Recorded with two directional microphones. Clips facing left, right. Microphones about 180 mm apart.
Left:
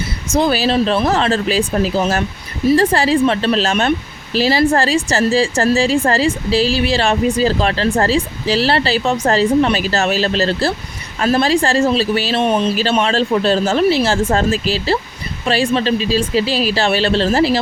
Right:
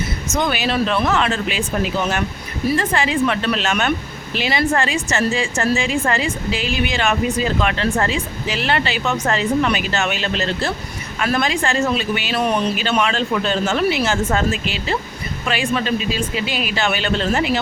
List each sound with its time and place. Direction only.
0.3 s a woman's voice: 35° left (ahead or behind)